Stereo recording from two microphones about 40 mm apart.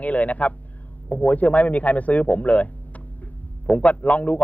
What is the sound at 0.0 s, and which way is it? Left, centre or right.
A man's voice, left.